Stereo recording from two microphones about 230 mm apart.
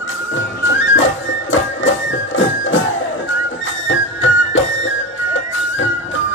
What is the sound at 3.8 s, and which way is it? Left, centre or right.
Music, left.